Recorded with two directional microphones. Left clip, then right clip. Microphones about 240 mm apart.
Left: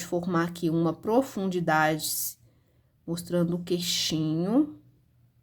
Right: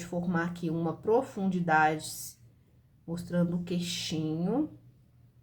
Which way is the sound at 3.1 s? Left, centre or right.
Left.